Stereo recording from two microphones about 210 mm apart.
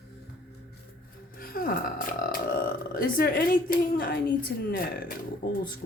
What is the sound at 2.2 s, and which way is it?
Speech, 40° left (ahead or behind).